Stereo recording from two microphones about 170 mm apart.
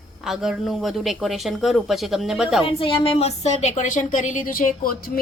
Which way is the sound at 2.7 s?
30° left (ahead or behind).